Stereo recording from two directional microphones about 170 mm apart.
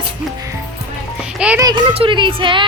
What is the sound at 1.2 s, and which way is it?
Music, 5° right (ahead or behind).